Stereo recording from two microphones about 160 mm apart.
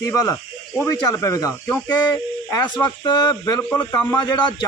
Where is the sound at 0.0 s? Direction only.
20° left (ahead or behind).